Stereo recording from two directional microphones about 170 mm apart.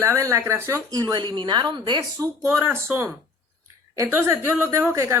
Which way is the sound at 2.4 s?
10° right (ahead or behind).